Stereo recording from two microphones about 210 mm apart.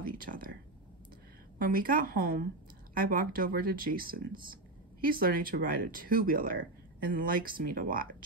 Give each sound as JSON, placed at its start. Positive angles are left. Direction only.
{"t": 0.0, "sound": "speech", "side_deg": -45}
{"t": 1.6, "sound": "speech", "side_deg": -45}